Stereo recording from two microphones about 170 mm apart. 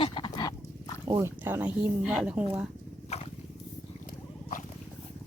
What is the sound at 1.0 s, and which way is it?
Speech, 15° right (ahead or behind).